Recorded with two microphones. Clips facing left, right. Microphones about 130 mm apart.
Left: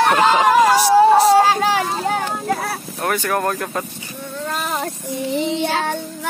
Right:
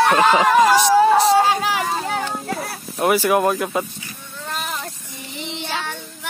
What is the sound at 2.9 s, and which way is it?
Speech, 10° right (ahead or behind).